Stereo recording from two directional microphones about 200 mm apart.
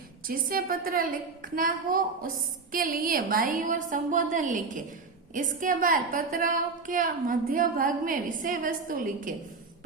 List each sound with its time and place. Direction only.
0.3 s a woman's voice: 45° right (ahead or behind)